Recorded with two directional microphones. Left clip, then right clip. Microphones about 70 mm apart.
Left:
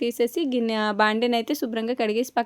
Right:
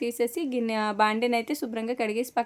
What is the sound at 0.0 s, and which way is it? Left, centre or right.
Speech, left.